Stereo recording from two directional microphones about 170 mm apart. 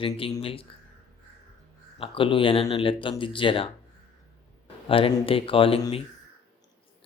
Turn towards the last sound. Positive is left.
turn(degrees=35)  # may be behind; listen again after turning